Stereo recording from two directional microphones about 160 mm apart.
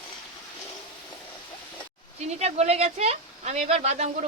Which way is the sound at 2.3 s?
40° right (ahead or behind).